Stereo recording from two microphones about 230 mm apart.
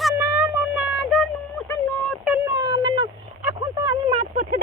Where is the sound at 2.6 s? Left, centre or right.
Centre.